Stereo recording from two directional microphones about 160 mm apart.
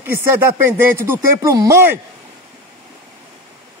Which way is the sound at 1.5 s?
20° right (ahead or behind).